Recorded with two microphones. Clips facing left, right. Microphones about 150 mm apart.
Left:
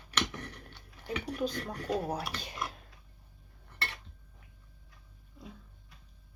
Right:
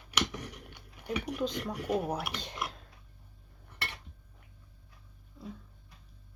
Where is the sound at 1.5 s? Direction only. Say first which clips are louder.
Right 2 dB; 10° right (ahead or behind).